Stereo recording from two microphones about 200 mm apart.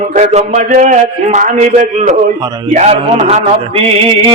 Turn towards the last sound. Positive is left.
turn(degrees=-30)  # may be behind; listen again after turning